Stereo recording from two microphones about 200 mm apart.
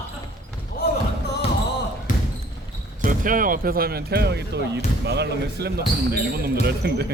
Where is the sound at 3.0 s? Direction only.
40° right (ahead or behind).